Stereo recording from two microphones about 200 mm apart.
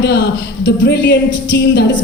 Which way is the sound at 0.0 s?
60° left (ahead or behind).